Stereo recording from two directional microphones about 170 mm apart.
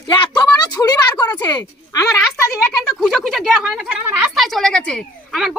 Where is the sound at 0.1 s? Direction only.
25° left (ahead or behind).